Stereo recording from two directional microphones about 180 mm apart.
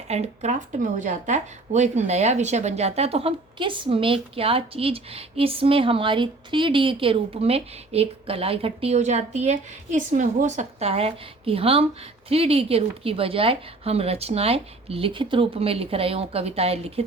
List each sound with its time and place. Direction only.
0.1 s speech: 40° right (ahead or behind)